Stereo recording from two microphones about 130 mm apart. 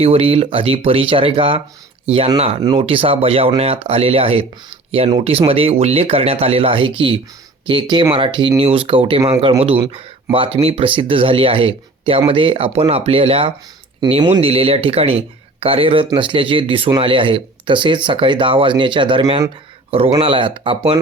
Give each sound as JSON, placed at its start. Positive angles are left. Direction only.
{"t": 0.0, "sound": "speech", "side_deg": -50}
{"t": 2.7, "sound": "speech", "side_deg": -45}
{"t": 14.2, "sound": "speech", "side_deg": -35}
{"t": 14.4, "sound": "speech", "side_deg": -45}